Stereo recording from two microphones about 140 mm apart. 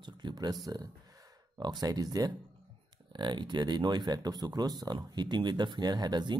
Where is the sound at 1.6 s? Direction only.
30° right (ahead or behind).